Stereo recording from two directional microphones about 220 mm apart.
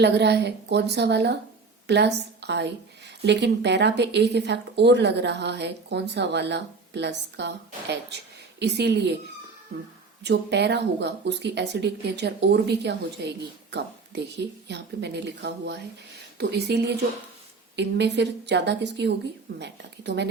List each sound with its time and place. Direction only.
0.0 s speech: 50° right (ahead or behind)
10.2 s speech: 50° right (ahead or behind)